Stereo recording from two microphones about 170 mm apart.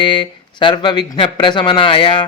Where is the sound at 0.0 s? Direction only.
30° left (ahead or behind).